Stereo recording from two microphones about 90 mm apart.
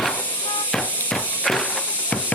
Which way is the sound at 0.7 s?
5° left (ahead or behind).